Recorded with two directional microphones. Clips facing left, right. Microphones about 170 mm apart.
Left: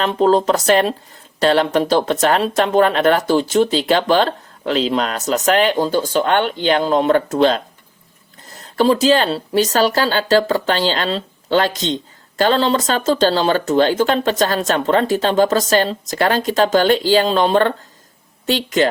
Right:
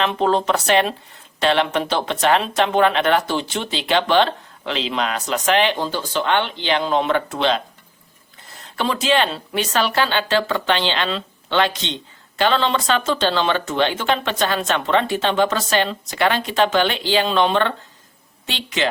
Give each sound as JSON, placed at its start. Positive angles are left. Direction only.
{"t": 0.0, "sound": "speech", "side_deg": 35}